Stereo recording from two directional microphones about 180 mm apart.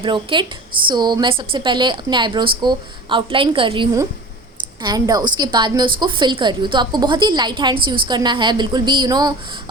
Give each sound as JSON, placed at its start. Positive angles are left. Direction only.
{"t": 0.0, "sound": "a woman's voice", "side_deg": -25}